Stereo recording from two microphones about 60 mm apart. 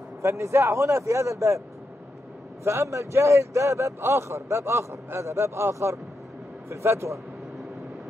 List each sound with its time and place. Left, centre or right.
0.2 s speech: right
2.6 s speech: right